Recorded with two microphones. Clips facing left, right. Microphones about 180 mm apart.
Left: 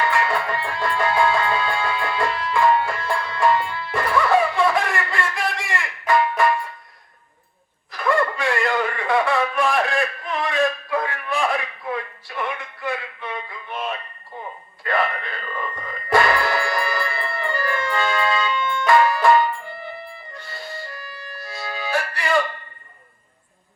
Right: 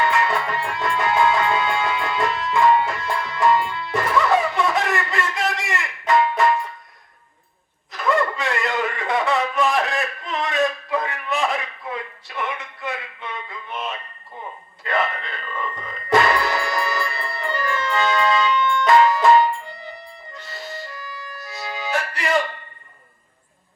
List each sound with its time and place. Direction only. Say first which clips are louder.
0.0 s music: right 1 dB; 20° right (ahead or behind)
7.9 s a sound: even; 20° right (ahead or behind)
15.7 s music: right 1 dB; 20° right (ahead or behind)